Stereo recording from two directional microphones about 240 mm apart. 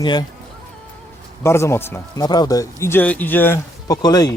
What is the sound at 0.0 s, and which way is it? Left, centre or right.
Speech, centre.